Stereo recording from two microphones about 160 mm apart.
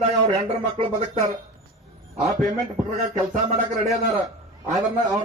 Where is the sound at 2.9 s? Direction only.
45° right (ahead or behind).